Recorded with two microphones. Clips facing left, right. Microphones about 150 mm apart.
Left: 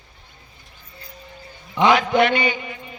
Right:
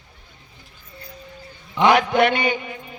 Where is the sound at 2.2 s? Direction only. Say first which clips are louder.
Even; 50° right (ahead or behind).